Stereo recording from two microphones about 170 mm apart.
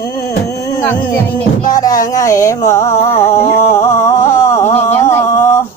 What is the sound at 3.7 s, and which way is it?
Music, 15° left (ahead or behind).